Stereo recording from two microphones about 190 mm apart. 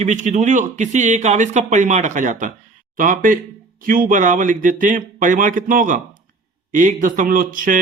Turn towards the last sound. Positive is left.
turn(degrees=-45)  # may be behind; listen again after turning